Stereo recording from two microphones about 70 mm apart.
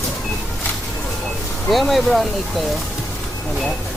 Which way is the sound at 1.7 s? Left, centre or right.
Centre.